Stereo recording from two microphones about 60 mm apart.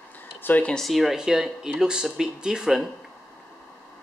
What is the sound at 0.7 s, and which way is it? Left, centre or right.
Speech, centre.